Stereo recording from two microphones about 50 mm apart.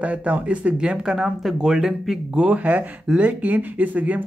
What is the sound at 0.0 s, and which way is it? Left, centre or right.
Speech, right.